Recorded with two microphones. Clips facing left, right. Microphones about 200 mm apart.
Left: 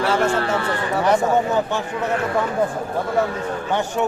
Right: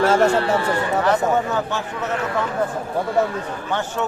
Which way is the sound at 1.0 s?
15° left (ahead or behind).